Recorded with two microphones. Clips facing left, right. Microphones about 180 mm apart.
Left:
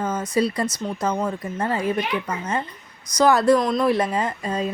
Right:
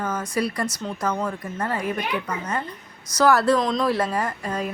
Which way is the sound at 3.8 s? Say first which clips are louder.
Left 2 dB; 20° left (ahead or behind).